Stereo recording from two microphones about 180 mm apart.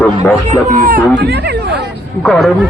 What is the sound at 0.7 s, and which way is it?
Speech, 50° right (ahead or behind).